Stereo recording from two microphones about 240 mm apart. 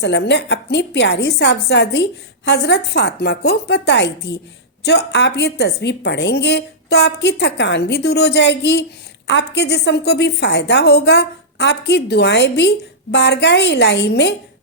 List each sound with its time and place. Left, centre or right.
0.0 s a woman's voice: left